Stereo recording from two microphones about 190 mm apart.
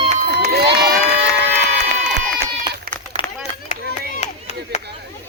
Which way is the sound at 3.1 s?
35° right (ahead or behind).